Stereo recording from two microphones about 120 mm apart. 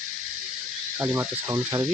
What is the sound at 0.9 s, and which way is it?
Speech, 20° right (ahead or behind).